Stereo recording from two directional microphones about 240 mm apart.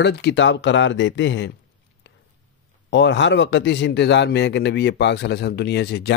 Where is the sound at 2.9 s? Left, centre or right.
Left.